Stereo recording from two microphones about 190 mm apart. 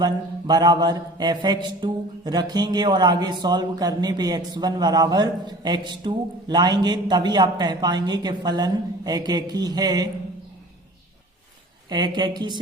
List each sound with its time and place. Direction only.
0.0 s a man's voice: 20° right (ahead or behind)
11.9 s a man's voice: 25° right (ahead or behind)